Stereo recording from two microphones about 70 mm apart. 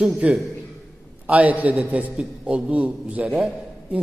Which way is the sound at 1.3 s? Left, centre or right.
Right.